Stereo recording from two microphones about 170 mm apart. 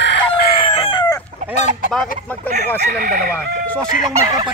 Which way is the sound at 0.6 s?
30° left (ahead or behind).